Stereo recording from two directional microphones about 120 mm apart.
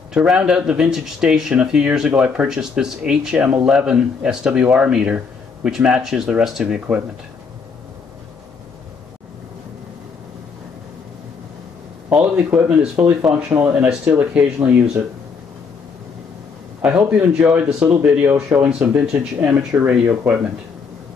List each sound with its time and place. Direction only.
0.1 s speech: 5° right (ahead or behind)
12.1 s speech: 10° right (ahead or behind)
16.8 s speech: 10° right (ahead or behind)
18.7 s speech: 10° right (ahead or behind)